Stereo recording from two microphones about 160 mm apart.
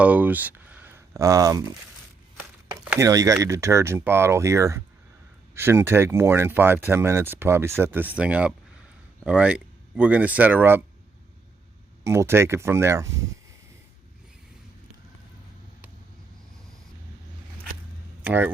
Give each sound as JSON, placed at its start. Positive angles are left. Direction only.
{"t": 0.0, "sound": "speech", "side_deg": -10}
{"t": 3.0, "sound": "speech", "side_deg": -20}
{"t": 12.0, "sound": "speech", "side_deg": -15}
{"t": 18.2, "sound": "speech", "side_deg": -10}